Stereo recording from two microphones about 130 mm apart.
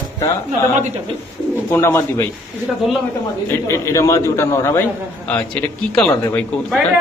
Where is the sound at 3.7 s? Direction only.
25° left (ahead or behind).